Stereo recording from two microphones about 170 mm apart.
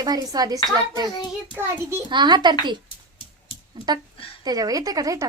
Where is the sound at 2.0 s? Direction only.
25° right (ahead or behind).